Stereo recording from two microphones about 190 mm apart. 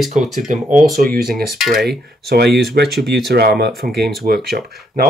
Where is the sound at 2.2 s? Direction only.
60° right (ahead or behind).